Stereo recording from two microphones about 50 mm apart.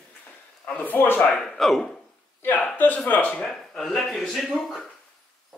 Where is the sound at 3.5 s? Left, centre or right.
Centre.